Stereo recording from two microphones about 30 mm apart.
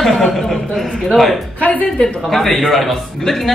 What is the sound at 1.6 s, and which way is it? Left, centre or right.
Speech, left.